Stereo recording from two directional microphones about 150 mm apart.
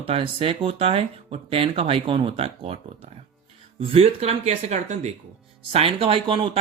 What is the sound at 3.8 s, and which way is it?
Speech, 40° right (ahead or behind).